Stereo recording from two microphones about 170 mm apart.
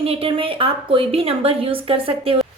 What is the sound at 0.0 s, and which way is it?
A woman's voice, 35° right (ahead or behind).